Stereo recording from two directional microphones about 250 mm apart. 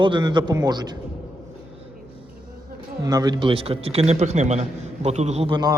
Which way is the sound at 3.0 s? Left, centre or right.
Centre.